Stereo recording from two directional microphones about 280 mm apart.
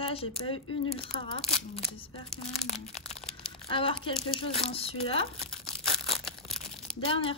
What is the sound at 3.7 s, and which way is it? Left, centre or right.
Speech, centre.